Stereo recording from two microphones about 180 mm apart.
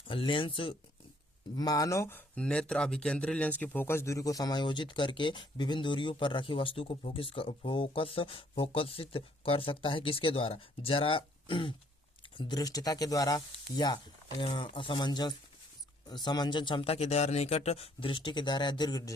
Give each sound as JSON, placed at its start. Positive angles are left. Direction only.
{"t": 0.1, "sound": "speech", "side_deg": 30}